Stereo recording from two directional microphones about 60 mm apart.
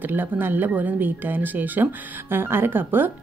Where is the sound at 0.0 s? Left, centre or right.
Right.